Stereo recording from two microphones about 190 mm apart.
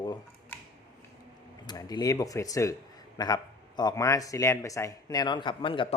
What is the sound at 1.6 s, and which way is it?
Speech, 20° left (ahead or behind).